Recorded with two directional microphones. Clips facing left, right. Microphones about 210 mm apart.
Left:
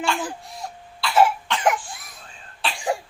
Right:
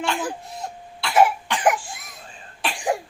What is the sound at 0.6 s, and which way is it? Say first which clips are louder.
Cough: left 3 dB; 20° right (ahead or behind).